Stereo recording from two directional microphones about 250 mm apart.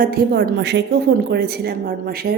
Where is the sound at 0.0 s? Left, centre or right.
Right.